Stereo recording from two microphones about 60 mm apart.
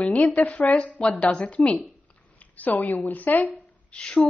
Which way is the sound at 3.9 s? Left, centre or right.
Centre.